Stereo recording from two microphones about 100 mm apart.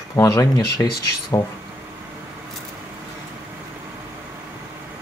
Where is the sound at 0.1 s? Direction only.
30° left (ahead or behind).